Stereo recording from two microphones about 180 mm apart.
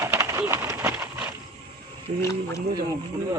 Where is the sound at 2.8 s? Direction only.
20° right (ahead or behind).